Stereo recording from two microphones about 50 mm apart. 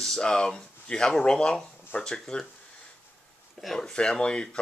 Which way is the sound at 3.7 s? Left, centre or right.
Centre.